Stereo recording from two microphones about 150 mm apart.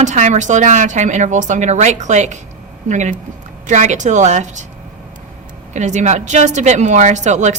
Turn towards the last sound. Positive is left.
turn(degrees=-50)  # may be behind; listen again after turning